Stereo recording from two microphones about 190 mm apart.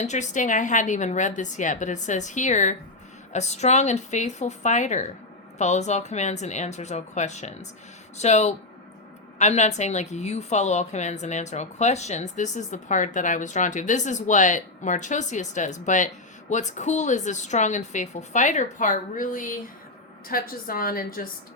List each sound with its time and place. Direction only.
0.0 s a woman's voice: 40° left (ahead or behind)